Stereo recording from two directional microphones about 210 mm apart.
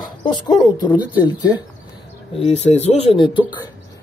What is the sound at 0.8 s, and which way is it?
Speech, 20° left (ahead or behind).